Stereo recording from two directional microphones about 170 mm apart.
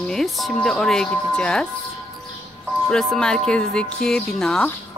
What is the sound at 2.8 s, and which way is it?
Speech, 5° left (ahead or behind).